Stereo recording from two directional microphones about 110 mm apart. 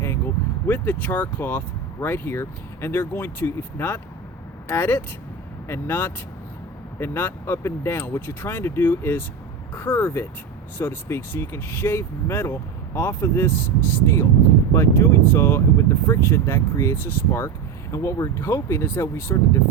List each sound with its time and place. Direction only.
0.7 s speech: 15° left (ahead or behind)